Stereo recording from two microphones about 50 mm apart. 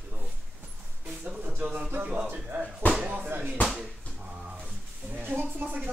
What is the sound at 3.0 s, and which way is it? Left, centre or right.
Speech, right.